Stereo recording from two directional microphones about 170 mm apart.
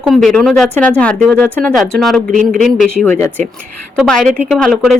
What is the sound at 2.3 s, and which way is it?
Speech, 55° right (ahead or behind).